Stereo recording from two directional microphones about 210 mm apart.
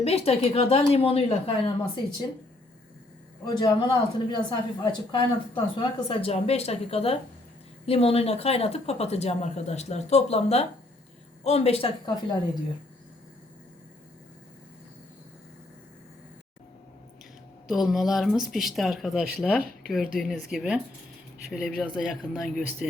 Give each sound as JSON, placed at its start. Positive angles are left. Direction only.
{"t": 0.0, "sound": "speech", "side_deg": 30}
{"t": 3.6, "sound": "speech", "side_deg": 20}
{"t": 17.7, "sound": "speech", "side_deg": 0}